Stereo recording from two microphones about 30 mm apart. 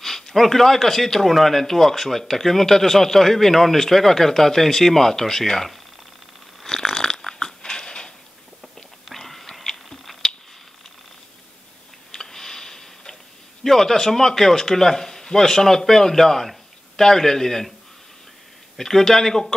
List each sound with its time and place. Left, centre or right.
0.0 s speech: centre
6.6 s crunch: centre
7.1 s dog: centre
9.1 s whispering: centre
12.1 s tick: centre
13.7 s speech: centre
18.8 s speech: centre